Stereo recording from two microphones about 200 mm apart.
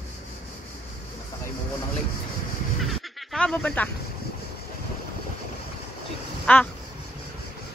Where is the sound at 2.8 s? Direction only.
Centre (ahead or behind).